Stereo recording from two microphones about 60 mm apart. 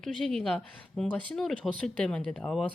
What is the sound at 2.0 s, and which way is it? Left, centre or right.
Speech, centre.